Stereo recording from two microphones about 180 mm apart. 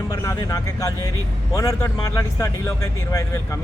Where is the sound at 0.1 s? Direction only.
20° left (ahead or behind).